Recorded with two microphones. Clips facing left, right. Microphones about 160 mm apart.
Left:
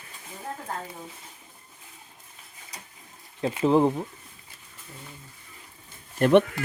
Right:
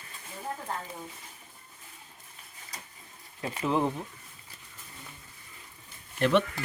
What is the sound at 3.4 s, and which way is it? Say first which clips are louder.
Speech: left 7 dB; 25° left (ahead or behind).